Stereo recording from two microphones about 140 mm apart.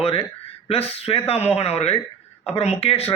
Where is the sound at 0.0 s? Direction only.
45° left (ahead or behind).